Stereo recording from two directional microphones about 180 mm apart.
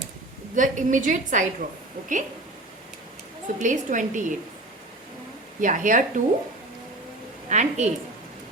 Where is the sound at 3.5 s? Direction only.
45° right (ahead or behind).